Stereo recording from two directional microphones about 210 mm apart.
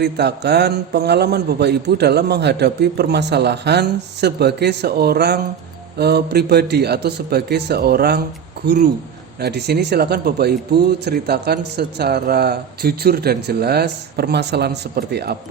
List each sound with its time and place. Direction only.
0.0 s speech: 50° right (ahead or behind)